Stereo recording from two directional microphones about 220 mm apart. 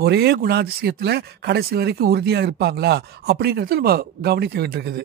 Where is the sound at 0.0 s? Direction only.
45° right (ahead or behind).